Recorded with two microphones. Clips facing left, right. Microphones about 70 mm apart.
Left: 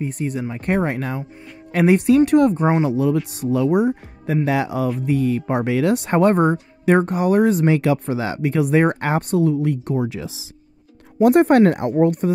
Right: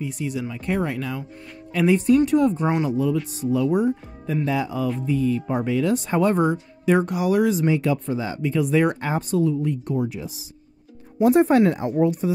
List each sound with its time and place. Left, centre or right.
0.0 s speech: left
1.7 s speech: left
2.5 s speech: left
2.9 s speech: left
7.6 s speech: left
10.0 s speech: left
11.2 s speech: left